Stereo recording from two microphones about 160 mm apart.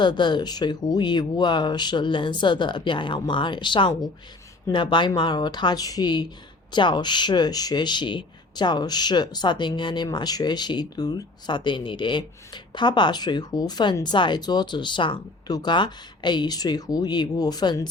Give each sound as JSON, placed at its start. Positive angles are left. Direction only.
{"t": 0.0, "sound": "speech", "side_deg": 30}